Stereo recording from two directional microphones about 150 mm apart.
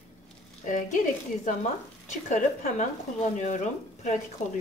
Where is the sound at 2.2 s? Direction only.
55° left (ahead or behind).